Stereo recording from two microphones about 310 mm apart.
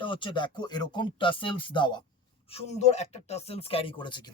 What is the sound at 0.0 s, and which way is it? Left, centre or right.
Speech, centre.